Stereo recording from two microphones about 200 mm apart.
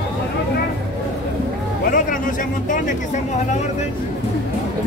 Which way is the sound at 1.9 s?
40° left (ahead or behind).